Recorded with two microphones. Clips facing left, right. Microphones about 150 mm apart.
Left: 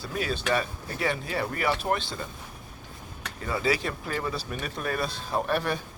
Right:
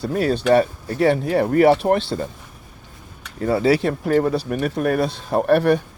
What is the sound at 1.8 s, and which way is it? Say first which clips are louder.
Speech: right 10 dB; 70° right (ahead or behind).